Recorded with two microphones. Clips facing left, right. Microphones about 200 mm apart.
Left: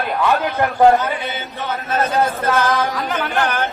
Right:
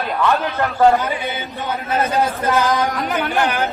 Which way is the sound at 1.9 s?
15° right (ahead or behind).